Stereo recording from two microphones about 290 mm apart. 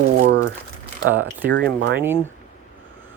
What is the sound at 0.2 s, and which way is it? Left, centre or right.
Crumpling, right.